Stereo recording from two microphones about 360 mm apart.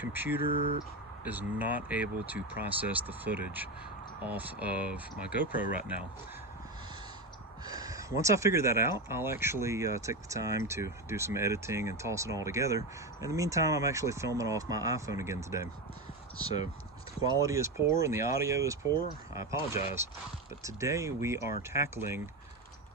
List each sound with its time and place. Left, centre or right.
0.0 s speech: centre
1.2 s speech: centre
7.6 s speech: centre
17.3 s speech: centre